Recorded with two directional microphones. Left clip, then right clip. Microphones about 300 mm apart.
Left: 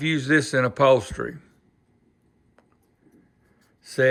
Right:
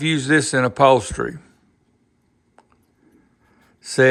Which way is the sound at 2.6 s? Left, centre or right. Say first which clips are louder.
Right 6 dB; centre.